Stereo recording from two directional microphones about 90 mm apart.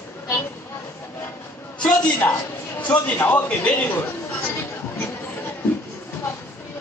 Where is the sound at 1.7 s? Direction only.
10° left (ahead or behind).